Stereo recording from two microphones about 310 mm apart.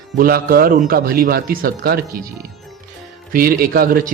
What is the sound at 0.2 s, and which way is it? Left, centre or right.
Speech, right.